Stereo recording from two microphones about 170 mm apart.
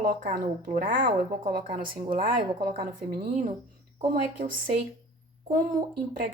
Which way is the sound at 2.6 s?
60° right (ahead or behind).